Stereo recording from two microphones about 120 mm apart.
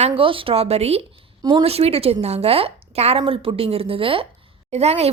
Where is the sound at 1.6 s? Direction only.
55° right (ahead or behind).